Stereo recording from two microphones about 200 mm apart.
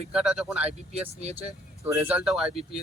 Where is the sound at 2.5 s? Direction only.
30° right (ahead or behind).